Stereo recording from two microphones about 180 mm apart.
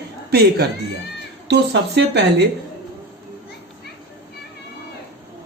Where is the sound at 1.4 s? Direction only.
70° right (ahead or behind).